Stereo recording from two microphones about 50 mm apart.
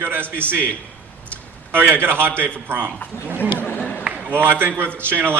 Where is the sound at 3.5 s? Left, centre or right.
Left.